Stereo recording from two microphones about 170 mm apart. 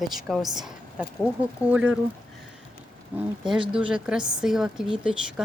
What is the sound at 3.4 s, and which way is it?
Speech, 30° right (ahead or behind).